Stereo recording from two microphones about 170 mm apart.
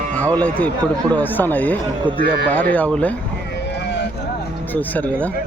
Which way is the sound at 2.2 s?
65° right (ahead or behind).